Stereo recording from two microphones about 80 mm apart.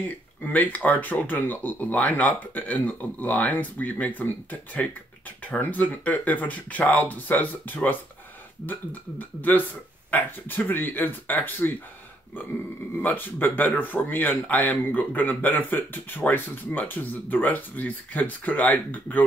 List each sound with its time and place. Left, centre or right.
0.4 s speech: left
9.4 s speech: left
13.0 s speech: left